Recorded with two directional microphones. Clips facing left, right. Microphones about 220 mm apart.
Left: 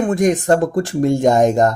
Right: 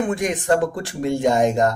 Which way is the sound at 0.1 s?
45° left (ahead or behind).